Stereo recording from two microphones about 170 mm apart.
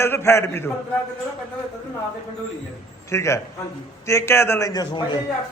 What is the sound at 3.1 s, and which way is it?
Speech, 15° left (ahead or behind).